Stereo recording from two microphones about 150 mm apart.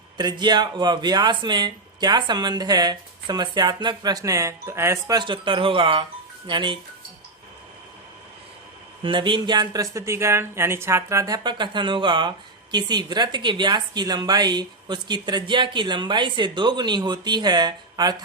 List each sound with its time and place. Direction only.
0.2 s speech: 30° right (ahead or behind)
9.0 s speech: 35° right (ahead or behind)
11.4 s speech: 30° right (ahead or behind)